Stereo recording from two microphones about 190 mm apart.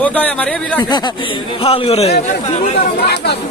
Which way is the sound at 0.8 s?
25° left (ahead or behind).